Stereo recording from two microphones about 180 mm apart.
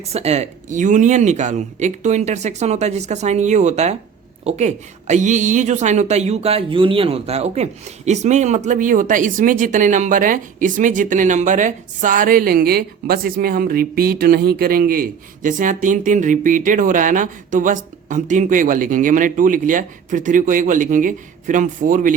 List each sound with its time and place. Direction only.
0.1 s a woman's voice: 35° right (ahead or behind)